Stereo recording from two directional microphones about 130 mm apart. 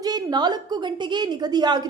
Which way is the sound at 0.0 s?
30° right (ahead or behind).